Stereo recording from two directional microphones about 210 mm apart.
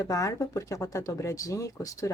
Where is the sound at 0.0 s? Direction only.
15° left (ahead or behind).